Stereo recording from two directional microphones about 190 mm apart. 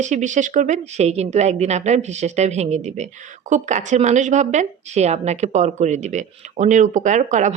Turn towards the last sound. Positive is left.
turn(degrees=-40)  # may be behind; listen again after turning